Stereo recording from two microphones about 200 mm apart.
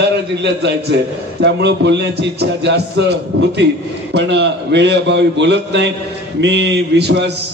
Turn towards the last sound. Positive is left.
turn(degrees=-55)  # may be behind; listen again after turning